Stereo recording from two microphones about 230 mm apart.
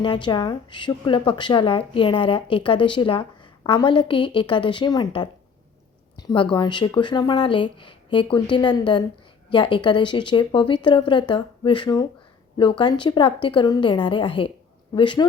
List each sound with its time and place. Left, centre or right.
0.0 s speech: centre